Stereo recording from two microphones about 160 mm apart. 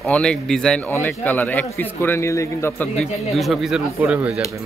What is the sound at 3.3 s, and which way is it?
Speech, centre (ahead or behind).